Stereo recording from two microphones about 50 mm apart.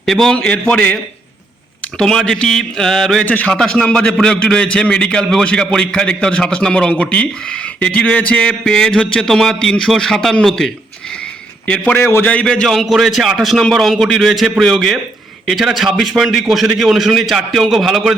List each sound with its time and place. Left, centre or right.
0.0 s a man's voice: centre
0.3 s a man's voice: left
2.0 s a man's voice: centre
3.2 s a man's voice: left
3.5 s a man's voice: centre
8.4 s a man's voice: centre
11.6 s a man's voice: left
11.9 s a man's voice: left
12.2 s a man's voice: left
12.6 s a man's voice: centre